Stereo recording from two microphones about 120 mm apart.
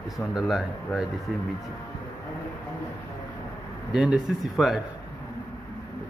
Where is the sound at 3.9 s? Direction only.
5° right (ahead or behind).